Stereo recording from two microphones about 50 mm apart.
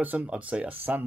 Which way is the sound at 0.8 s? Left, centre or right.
Right.